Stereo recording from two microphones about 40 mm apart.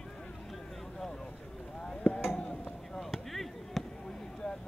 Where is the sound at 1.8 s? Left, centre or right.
Left.